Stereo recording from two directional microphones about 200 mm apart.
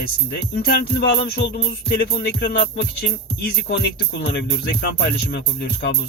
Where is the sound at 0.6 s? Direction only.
55° left (ahead or behind).